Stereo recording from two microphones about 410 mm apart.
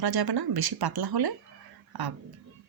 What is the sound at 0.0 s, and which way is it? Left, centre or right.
Speech, right.